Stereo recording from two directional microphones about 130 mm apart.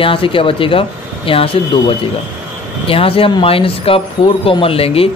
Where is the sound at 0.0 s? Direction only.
45° left (ahead or behind).